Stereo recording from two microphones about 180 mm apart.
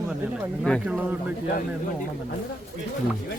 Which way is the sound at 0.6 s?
5° left (ahead or behind).